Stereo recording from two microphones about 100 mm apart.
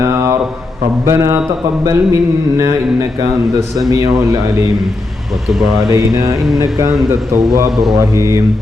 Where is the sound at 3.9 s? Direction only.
35° right (ahead or behind).